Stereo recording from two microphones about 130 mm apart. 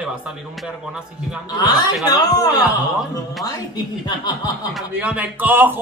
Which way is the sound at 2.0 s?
30° left (ahead or behind).